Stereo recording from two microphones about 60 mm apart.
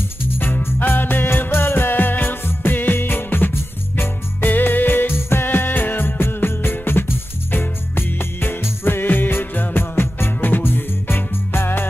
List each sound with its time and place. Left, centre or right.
0.4 s music: left